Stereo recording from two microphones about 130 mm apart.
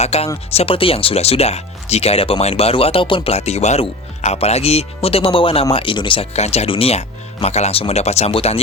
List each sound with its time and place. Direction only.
0.0 s speech: 55° left (ahead or behind)